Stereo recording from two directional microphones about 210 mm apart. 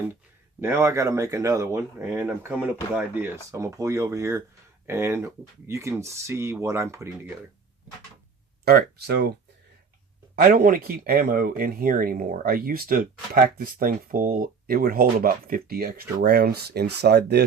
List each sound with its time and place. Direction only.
0.6 s speech: 10° right (ahead or behind)
8.6 s speech: 50° right (ahead or behind)
10.3 s speech: 40° right (ahead or behind)